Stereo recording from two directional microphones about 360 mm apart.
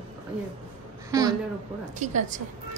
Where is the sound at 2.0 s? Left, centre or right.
Centre.